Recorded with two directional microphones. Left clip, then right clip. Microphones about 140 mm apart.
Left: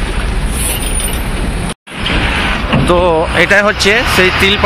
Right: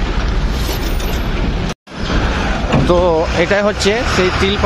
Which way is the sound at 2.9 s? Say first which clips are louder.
Left 2 dB; 10° right (ahead or behind).